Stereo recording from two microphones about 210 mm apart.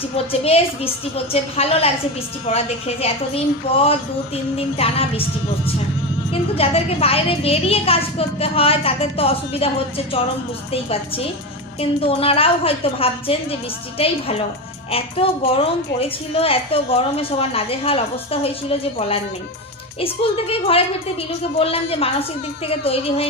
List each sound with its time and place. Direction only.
0.3 s a woman's voice: 30° left (ahead or behind)
6.6 s a woman's voice: 25° left (ahead or behind)
14.8 s a woman's voice: 25° left (ahead or behind)